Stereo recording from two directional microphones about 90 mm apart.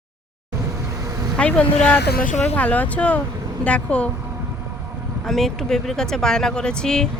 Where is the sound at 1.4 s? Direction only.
15° left (ahead or behind).